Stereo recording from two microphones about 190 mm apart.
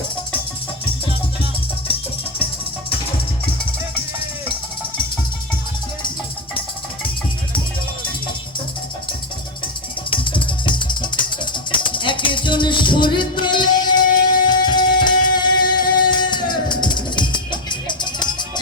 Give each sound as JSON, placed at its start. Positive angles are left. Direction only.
{"t": 10.1, "sound": "music", "side_deg": 25}